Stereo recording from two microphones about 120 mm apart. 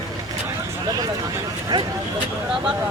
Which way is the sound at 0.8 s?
35° right (ahead or behind).